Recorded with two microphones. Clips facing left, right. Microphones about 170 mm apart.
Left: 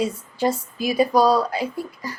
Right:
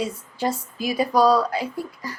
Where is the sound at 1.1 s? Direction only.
10° left (ahead or behind).